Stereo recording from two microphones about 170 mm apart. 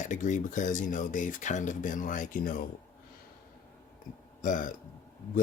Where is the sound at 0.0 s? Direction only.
45° left (ahead or behind).